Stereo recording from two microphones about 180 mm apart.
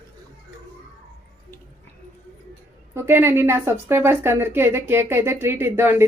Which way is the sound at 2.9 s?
15° right (ahead or behind).